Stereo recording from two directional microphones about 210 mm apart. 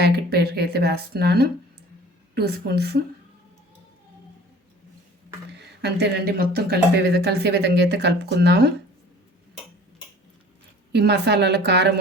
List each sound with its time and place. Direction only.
0.0 s speech: 50° right (ahead or behind)
5.5 s speech: 50° right (ahead or behind)
10.9 s a woman's voice: 55° right (ahead or behind)